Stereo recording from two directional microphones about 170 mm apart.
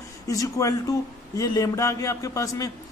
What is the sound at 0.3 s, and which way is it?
A man's voice, 20° left (ahead or behind).